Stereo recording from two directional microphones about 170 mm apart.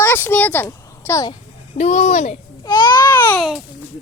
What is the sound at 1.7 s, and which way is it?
Speech, 40° left (ahead or behind).